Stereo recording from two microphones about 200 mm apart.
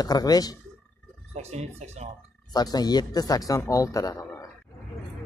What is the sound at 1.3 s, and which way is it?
Speech, 35° right (ahead or behind).